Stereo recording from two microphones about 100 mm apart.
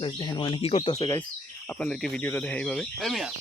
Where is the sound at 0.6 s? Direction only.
75° left (ahead or behind).